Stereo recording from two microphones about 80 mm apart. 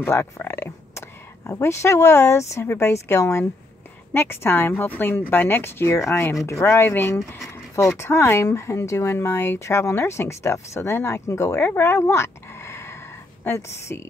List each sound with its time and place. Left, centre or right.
0.0 s a woman's voice: left